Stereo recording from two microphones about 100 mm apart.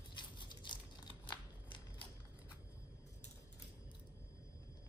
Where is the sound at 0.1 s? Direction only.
50° left (ahead or behind).